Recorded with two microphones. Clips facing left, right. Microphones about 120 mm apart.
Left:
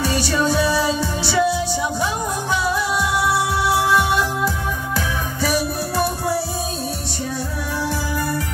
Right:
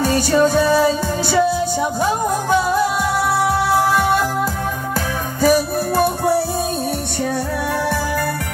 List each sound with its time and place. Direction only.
0.0 s music: 45° right (ahead or behind)
2.5 s music: 45° right (ahead or behind)
5.4 s music: 45° right (ahead or behind)